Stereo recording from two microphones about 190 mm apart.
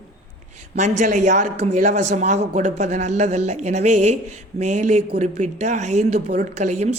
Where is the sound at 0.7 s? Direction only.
40° right (ahead or behind).